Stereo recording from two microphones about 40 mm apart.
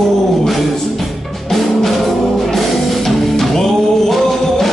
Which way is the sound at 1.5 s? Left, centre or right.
Centre.